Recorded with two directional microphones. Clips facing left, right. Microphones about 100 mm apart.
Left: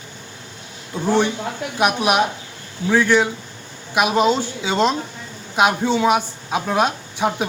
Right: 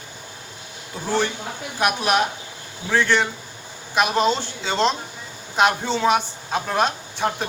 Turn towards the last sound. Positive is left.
turn(degrees=5)  # may be behind; listen again after turning